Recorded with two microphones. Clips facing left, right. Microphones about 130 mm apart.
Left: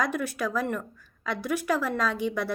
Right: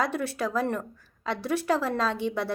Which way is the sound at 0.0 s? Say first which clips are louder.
Even; 30° right (ahead or behind).